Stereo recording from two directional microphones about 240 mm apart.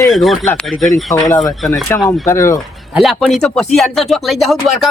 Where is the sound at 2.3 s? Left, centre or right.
Centre.